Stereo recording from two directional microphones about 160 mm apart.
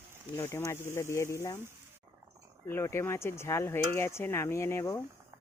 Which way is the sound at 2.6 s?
15° left (ahead or behind).